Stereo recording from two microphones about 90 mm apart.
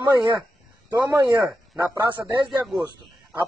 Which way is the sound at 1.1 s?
45° right (ahead or behind).